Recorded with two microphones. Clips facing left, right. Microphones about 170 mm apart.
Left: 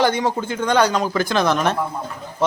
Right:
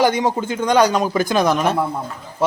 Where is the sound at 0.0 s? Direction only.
15° right (ahead or behind).